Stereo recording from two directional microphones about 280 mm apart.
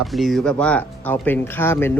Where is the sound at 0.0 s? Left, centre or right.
Centre.